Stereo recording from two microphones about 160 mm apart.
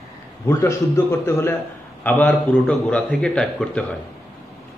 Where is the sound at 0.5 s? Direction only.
15° left (ahead or behind).